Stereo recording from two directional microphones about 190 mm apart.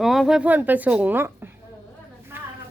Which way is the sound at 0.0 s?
Centre (ahead or behind).